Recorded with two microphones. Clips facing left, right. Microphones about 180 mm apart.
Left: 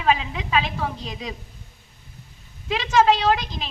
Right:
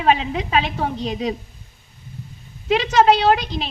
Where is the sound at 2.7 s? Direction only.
40° right (ahead or behind).